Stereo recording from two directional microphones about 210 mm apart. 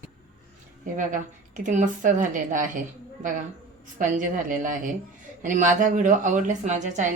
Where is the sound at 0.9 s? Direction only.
40° right (ahead or behind).